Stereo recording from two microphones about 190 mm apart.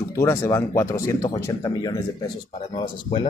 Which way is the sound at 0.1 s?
15° left (ahead or behind).